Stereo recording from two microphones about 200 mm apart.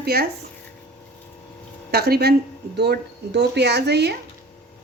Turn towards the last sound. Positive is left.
turn(degrees=-55)  # may be behind; listen again after turning